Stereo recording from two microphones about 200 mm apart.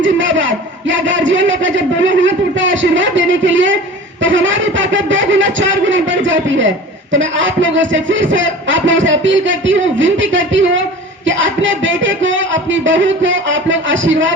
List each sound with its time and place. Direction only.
0.0 s speech: 65° right (ahead or behind)